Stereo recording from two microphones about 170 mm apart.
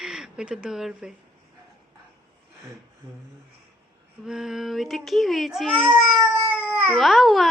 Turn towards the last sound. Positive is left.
turn(degrees=0)  # may be behind; listen again after turning